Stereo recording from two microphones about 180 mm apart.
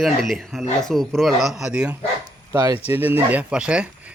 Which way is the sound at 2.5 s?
15° right (ahead or behind).